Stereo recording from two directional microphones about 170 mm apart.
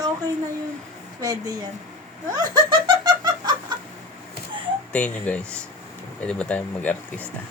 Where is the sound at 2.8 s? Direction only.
25° right (ahead or behind).